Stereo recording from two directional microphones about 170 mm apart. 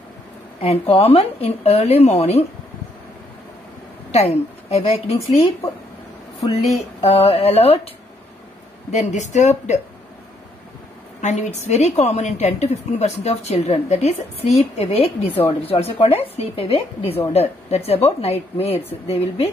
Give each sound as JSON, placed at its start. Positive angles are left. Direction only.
{"t": 0.6, "sound": "a woman's voice", "side_deg": 35}
{"t": 4.1, "sound": "a woman's voice", "side_deg": 40}
{"t": 6.4, "sound": "a woman's voice", "side_deg": 35}
{"t": 8.9, "sound": "a woman's voice", "side_deg": 45}
{"t": 11.1, "sound": "a woman's voice", "side_deg": 45}